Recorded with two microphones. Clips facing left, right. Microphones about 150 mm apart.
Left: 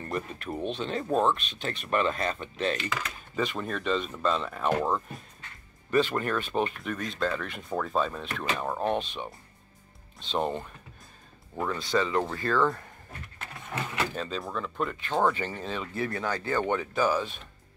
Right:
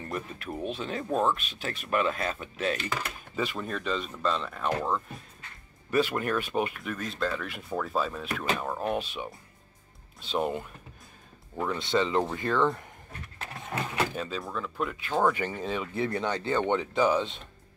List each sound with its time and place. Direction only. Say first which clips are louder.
0.0 s speech: left 2 dB; centre (ahead or behind)
5.9 s speech: left 1 dB; 5° right (ahead or behind)
11.8 s speech: right 1 dB; 25° right (ahead or behind)
14.1 s speech: left 1 dB; 5° right (ahead or behind)
15.9 s speech: even; 20° right (ahead or behind)